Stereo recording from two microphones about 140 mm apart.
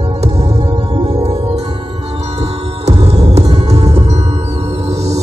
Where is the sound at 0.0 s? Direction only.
50° right (ahead or behind).